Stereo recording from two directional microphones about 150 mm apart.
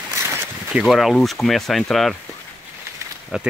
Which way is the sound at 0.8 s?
Centre (ahead or behind).